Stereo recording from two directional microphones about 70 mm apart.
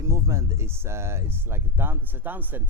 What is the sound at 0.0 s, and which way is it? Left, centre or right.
Speech, right.